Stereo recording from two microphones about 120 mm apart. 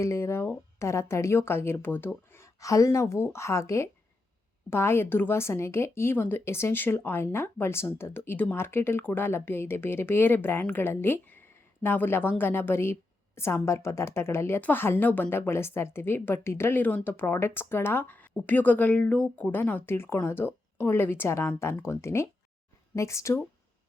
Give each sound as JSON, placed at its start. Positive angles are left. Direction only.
{"t": 0.0, "sound": "speech", "side_deg": 25}